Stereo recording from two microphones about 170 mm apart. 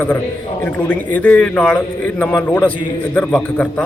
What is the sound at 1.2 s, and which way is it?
Speech, 10° left (ahead or behind).